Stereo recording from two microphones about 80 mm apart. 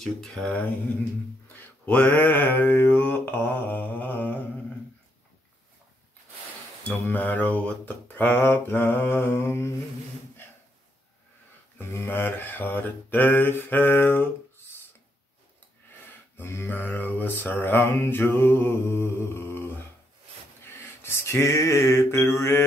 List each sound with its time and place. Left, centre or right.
0.0 s speech: centre
1.5 s mantra: left
6.8 s mantra: left
11.8 s mantra: left
16.3 s mantra: left
20.6 s a sound: left